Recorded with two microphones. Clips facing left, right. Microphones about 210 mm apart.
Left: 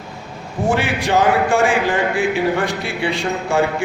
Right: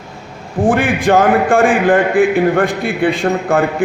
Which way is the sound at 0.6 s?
50° right (ahead or behind).